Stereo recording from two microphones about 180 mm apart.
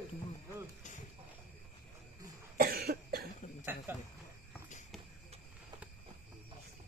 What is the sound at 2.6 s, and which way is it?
Cough, 55° right (ahead or behind).